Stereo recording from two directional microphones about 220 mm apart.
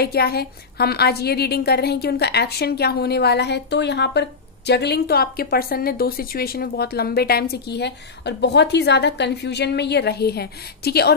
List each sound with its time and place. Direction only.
0.0 s a woman's voice: 45° left (ahead or behind)